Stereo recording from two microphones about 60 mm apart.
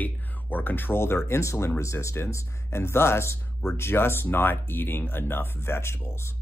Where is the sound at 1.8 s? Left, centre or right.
Left.